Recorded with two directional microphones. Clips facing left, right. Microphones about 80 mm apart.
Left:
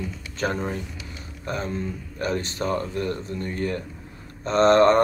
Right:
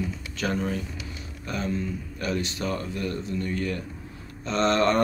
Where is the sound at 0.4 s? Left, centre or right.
Left.